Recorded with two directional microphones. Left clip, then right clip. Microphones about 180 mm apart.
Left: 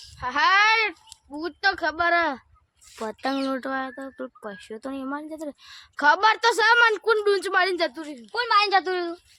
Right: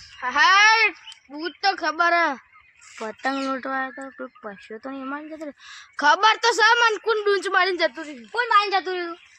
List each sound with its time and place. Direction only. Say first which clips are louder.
0.2 s a child's voice: right 3 dB; 35° left (ahead or behind)
3.0 s a woman's voice: right 1 dB; 35° left (ahead or behind)
8.5 s a woman's voice: even; centre (ahead or behind)
8.8 s speech: left 1 dB; 35° left (ahead or behind)